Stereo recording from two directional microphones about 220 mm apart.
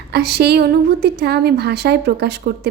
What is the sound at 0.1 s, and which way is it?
A woman's voice, 45° right (ahead or behind).